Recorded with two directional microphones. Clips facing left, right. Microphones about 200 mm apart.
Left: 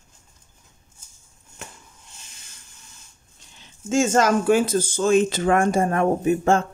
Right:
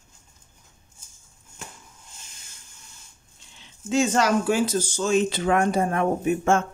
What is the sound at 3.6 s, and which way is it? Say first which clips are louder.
Speech: left 2 dB; 45° left (ahead or behind).